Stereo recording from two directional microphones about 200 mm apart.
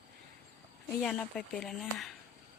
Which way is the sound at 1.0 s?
5° left (ahead or behind).